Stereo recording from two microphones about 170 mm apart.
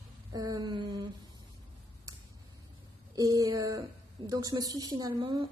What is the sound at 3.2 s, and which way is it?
A woman's voice, 20° right (ahead or behind).